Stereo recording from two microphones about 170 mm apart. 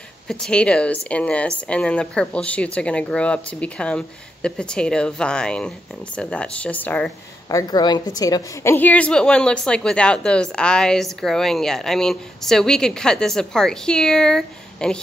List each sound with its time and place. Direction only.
0.3 s a woman's voice: 5° left (ahead or behind)
7.4 s a woman's voice: 20° left (ahead or behind); by 15.0 s 5° left (ahead or behind)